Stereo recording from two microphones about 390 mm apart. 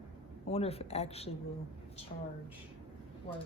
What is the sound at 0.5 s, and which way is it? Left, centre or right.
Speech, centre.